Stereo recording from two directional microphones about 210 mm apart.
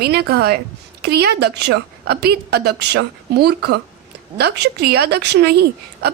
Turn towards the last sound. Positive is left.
turn(degrees=-50)  # may be behind; listen again after turning